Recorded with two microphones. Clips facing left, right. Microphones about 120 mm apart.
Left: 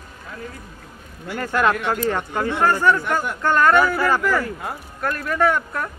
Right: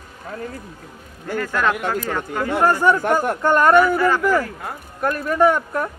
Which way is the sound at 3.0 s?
45° right (ahead or behind).